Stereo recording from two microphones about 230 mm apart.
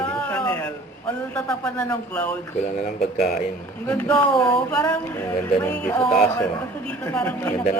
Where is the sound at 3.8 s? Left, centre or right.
Centre.